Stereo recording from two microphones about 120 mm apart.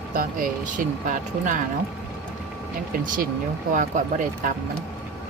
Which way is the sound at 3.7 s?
90° right.